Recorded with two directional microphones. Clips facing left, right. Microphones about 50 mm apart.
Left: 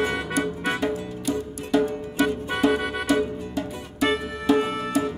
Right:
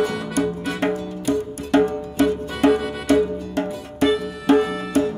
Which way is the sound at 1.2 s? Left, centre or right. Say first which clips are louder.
Right 6 dB; right.